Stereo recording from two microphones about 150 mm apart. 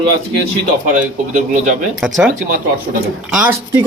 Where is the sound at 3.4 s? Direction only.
10° right (ahead or behind).